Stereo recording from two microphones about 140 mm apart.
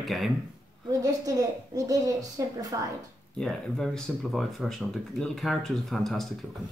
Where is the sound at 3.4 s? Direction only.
5° left (ahead or behind).